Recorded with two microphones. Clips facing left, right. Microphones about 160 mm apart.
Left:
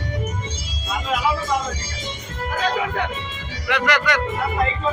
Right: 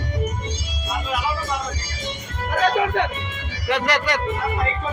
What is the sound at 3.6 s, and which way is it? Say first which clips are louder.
Speech: left 1 dB; 35° right (ahead or behind).